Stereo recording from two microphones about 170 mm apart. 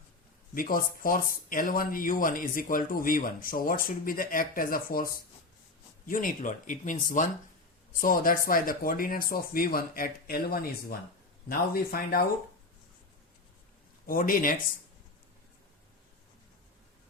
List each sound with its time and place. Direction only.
0.5 s speech: 55° left (ahead or behind)
6.1 s speech: 55° left (ahead or behind)
14.1 s speech: 55° left (ahead or behind)